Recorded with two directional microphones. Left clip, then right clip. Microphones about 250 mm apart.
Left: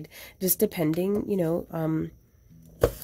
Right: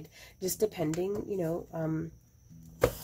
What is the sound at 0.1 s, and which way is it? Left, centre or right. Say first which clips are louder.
Speech: left 5 dB; left.